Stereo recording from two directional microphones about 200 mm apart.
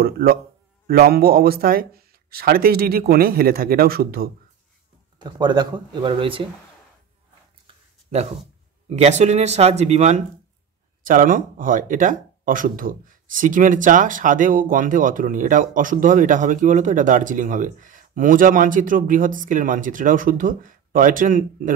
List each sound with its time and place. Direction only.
0.0 s a man's voice: 50° right (ahead or behind)
5.2 s speech: 20° right (ahead or behind)
7.6 s a sound: 30° right (ahead or behind)
8.8 s speech: 35° right (ahead or behind)